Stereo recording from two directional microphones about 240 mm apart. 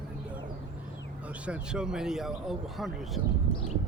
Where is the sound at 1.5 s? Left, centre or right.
Centre.